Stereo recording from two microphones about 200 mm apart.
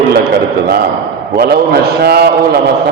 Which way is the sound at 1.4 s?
50° right (ahead or behind).